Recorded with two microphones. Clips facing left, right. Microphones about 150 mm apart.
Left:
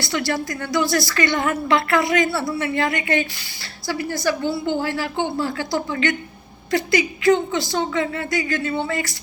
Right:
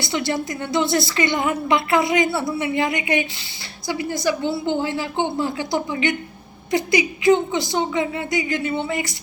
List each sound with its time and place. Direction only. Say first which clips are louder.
0.0 s a woman's voice: even; 20° right (ahead or behind)